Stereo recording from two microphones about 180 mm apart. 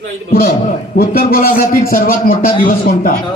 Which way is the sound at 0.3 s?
55° left (ahead or behind).